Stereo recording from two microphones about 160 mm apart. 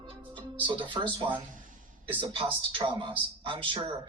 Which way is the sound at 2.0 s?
30° right (ahead or behind).